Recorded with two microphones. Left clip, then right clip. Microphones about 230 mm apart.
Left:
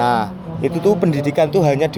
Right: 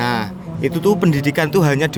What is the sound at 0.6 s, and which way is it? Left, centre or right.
Speech, right.